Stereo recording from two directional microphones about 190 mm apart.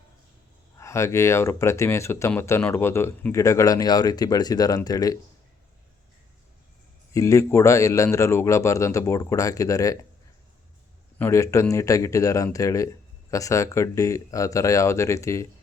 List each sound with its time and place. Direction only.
0.8 s speech: 15° left (ahead or behind)
7.1 s speech: 15° left (ahead or behind)
11.2 s speech: 15° left (ahead or behind)